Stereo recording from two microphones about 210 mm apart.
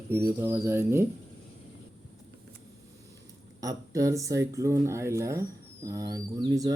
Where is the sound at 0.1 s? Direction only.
15° right (ahead or behind).